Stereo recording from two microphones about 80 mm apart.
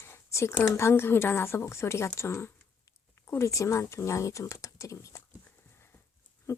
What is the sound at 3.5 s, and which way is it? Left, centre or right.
Speech, left.